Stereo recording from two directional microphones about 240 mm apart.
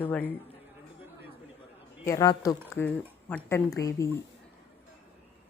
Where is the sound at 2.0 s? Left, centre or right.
Centre.